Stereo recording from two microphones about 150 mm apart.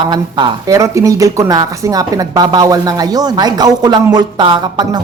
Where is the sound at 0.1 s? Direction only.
30° right (ahead or behind).